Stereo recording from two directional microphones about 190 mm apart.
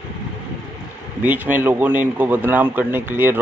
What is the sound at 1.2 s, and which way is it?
A man's voice, 10° right (ahead or behind).